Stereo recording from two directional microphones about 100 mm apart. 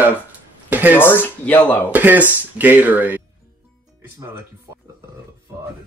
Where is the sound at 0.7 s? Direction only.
15° right (ahead or behind).